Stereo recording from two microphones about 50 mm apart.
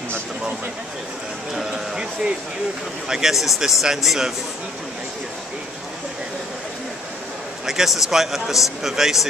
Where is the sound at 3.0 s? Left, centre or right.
Centre.